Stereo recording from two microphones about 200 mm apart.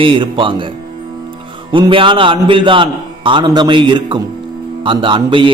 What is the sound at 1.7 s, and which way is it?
A man's voice, 25° right (ahead or behind).